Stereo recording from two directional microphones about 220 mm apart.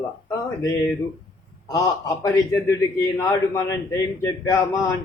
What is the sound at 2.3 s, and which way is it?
A man's voice, 15° left (ahead or behind).